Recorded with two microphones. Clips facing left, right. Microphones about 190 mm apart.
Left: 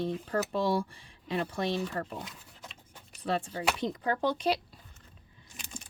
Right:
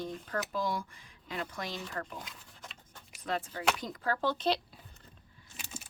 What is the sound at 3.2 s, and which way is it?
Speech, 30° left (ahead or behind).